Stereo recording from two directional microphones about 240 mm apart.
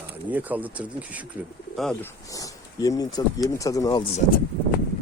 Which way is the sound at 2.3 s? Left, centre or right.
Centre.